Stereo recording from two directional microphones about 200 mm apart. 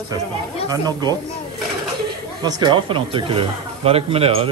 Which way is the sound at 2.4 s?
20° right (ahead or behind).